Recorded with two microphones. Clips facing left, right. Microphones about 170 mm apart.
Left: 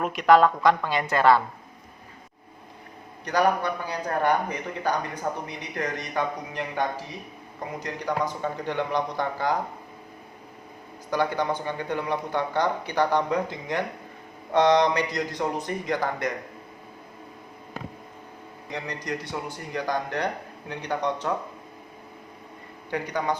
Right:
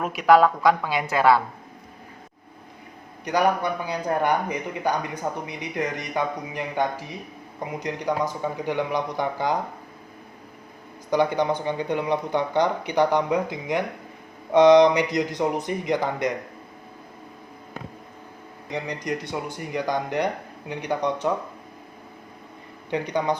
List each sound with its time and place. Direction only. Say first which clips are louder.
0.0 s a woman's voice: right 1 dB; 5° right (ahead or behind)
3.2 s a man's voice: right 1 dB; 15° right (ahead or behind)
11.1 s a man's voice: right 4 dB; 15° right (ahead or behind)
18.7 s a man's voice: right 3 dB; 15° right (ahead or behind)
22.9 s speech: right 3 dB; 20° right (ahead or behind)